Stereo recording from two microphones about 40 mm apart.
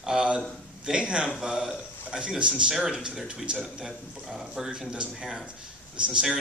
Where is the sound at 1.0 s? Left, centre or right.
Right.